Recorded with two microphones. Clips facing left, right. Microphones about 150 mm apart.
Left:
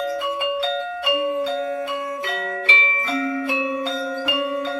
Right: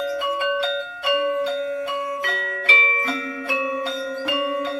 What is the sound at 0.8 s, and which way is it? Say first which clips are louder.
Music: left 4 dB; 65° left (ahead or behind).